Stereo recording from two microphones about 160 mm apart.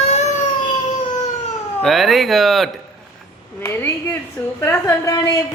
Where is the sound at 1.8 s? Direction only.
Centre (ahead or behind).